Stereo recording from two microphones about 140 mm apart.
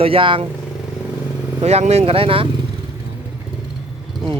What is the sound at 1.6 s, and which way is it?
Speech, 50° right (ahead or behind).